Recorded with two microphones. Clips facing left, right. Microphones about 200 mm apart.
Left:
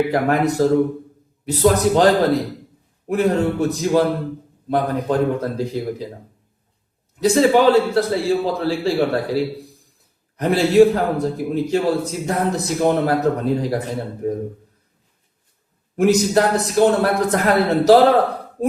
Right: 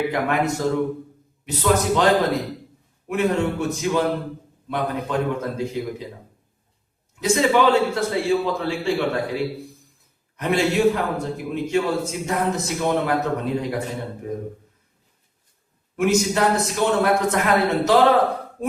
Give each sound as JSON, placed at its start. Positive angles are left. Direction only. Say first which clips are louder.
{"t": 0.1, "sound": "a man's voice", "louder": "left 4 dB", "side_deg": 35}
{"t": 3.1, "sound": "a man's voice", "louder": "left 3 dB", "side_deg": 35}
{"t": 7.2, "sound": "a man's voice", "louder": "left 4 dB", "side_deg": 35}
{"t": 16.0, "sound": "a man's voice", "louder": "left 4 dB", "side_deg": 35}